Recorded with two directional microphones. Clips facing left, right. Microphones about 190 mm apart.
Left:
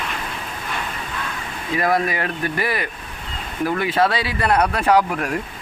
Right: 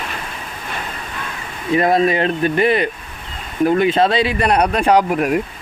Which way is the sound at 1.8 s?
25° right (ahead or behind).